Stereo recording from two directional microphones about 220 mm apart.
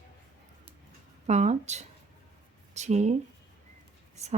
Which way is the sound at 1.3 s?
30° right (ahead or behind).